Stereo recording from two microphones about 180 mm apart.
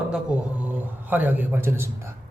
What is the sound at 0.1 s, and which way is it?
A man's voice, 10° right (ahead or behind).